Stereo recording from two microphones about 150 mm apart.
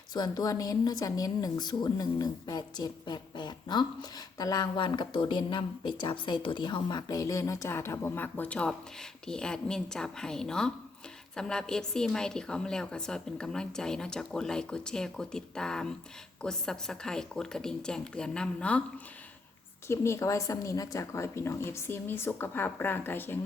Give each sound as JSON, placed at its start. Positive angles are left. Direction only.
{"t": 0.1, "sound": "a woman's voice", "side_deg": 30}
{"t": 19.9, "sound": "a woman's voice", "side_deg": 20}